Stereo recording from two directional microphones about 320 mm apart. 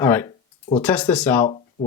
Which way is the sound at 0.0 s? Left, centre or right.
Centre.